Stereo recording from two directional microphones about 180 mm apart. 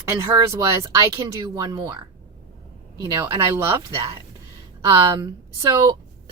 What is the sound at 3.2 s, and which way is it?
Speech, 15° right (ahead or behind).